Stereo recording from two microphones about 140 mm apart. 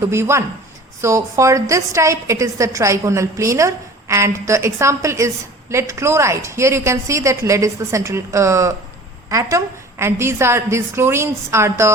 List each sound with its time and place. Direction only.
0.1 s a woman's voice: 20° right (ahead or behind)